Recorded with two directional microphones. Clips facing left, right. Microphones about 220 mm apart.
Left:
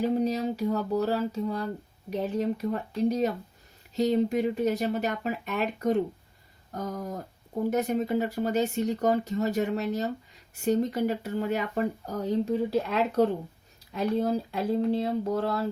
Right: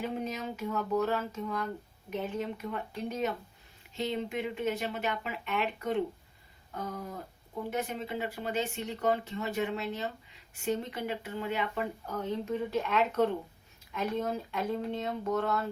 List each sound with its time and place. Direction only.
0.0 s speech: 35° left (ahead or behind)